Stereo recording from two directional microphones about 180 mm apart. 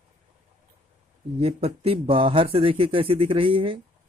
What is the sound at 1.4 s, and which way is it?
Speech, 35° right (ahead or behind).